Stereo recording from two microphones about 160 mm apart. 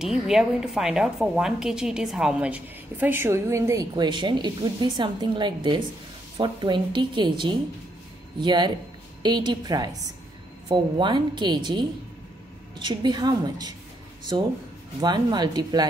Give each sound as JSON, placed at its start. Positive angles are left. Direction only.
{"t": 0.0, "sound": "a woman's voice", "side_deg": -5}
{"t": 3.9, "sound": "a woman's voice", "side_deg": -30}
{"t": 15.0, "sound": "a woman's voice", "side_deg": -25}